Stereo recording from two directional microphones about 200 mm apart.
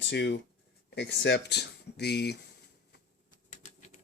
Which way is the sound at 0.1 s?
60° left (ahead or behind).